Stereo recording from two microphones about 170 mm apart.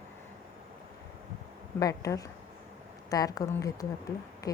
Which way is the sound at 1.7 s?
20° left (ahead or behind).